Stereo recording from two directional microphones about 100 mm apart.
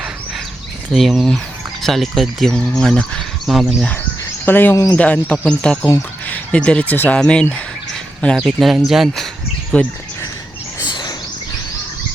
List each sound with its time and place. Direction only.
0.9 s speech: centre (ahead or behind)
4.4 s speech: 20° left (ahead or behind)
4.7 s speech: 35° left (ahead or behind)
4.9 s speech: 10° left (ahead or behind)
8.4 s speech: centre (ahead or behind)
9.7 s speech: 10° left (ahead or behind)